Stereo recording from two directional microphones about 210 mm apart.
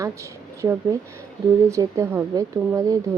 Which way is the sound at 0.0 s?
15° right (ahead or behind).